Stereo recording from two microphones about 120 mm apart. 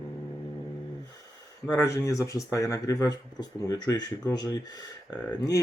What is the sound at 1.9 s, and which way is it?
Speech, 30° left (ahead or behind).